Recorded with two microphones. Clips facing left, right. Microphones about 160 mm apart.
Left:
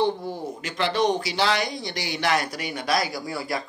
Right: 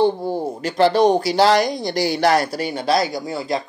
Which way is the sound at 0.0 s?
30° right (ahead or behind).